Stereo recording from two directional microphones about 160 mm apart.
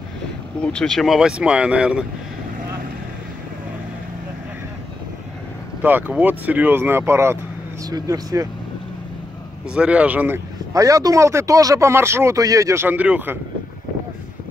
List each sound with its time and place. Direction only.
0.6 s speech: 5° left (ahead or behind)
5.8 s speech: 10° right (ahead or behind)
9.7 s speech: 5° right (ahead or behind)